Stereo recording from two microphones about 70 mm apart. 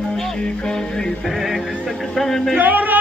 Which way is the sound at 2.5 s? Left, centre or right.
Right.